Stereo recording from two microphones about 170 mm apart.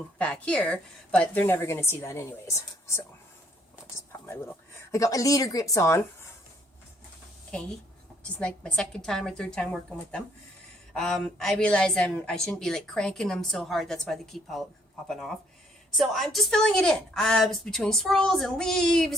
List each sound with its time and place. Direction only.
0.2 s a woman's voice: 5° left (ahead or behind)
4.3 s speech: 15° left (ahead or behind)
8.4 s a woman's voice: 5° left (ahead or behind)
10.9 s a woman's voice: 5° left (ahead or behind)